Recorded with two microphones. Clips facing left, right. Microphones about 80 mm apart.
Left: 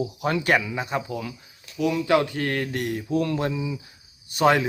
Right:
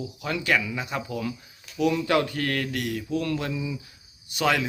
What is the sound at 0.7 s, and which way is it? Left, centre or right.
Speech, left.